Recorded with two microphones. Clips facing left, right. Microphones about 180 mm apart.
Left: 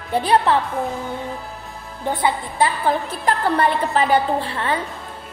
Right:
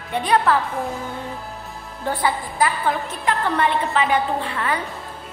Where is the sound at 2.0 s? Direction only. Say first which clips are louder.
Left 1 dB; 25° left (ahead or behind).